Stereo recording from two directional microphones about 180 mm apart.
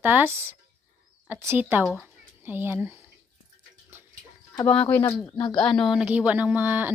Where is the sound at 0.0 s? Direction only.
10° right (ahead or behind).